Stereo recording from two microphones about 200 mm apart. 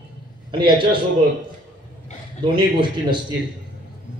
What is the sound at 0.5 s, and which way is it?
Speech, 25° right (ahead or behind).